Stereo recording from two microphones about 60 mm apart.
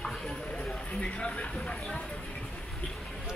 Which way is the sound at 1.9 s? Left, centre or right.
Centre.